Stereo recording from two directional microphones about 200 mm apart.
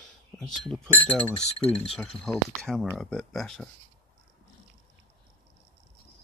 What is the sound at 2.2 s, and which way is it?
Speech, centre (ahead or behind).